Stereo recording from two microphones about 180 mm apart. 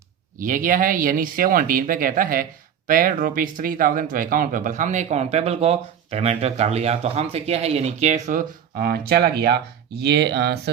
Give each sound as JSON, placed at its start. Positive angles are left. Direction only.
{"t": 0.3, "sound": "speech", "side_deg": -50}